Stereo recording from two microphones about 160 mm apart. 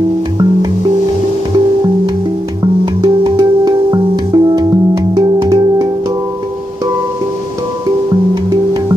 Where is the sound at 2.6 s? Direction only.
30° right (ahead or behind).